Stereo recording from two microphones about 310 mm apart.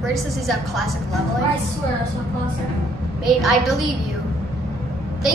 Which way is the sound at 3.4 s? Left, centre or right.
Centre.